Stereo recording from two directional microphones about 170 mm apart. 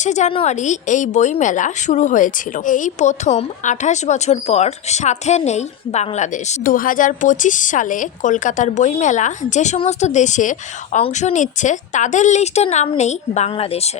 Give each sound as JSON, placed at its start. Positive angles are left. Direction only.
{"t": 0.0, "sound": "a woman's voice", "side_deg": 45}